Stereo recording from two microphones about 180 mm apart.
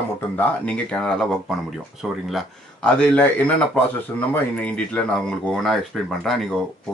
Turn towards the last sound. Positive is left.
turn(degrees=0)  # may be behind; listen again after turning